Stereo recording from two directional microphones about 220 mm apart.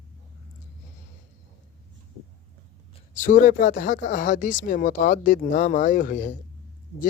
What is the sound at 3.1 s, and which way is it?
Speech, 35° left (ahead or behind).